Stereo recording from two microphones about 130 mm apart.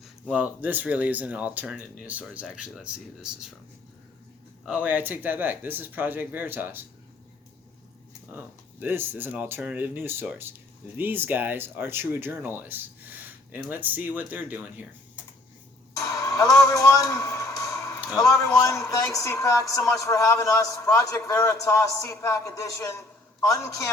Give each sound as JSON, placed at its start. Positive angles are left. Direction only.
{"t": 0.0, "sound": "speech", "side_deg": -5}
{"t": 4.6, "sound": "speech", "side_deg": -10}
{"t": 8.3, "sound": "speech", "side_deg": -15}
{"t": 16.0, "sound": "a sound", "side_deg": 25}
{"t": 18.2, "sound": "speech", "side_deg": 25}